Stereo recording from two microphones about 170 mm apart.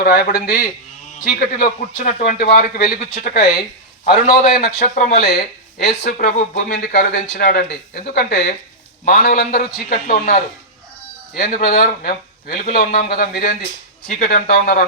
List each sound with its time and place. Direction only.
0.0 s speech: 60° left (ahead or behind)
2.1 s speech: 60° left (ahead or behind)
5.2 s speech: 70° left (ahead or behind)
6.2 s speech: 50° left (ahead or behind)
6.7 s speech: 75° left (ahead or behind)
9.0 s speech: 55° left (ahead or behind)
11.3 s speech: 55° left (ahead or behind)